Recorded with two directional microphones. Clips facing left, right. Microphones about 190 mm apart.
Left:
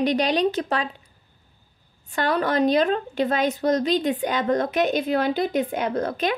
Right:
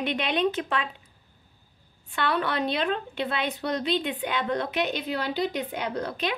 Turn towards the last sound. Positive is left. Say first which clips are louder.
# left 5 dB
turn(degrees=50)  # may be behind; listen again after turning